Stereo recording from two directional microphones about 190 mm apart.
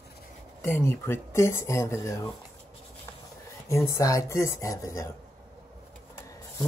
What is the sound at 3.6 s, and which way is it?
Speech, 15° left (ahead or behind).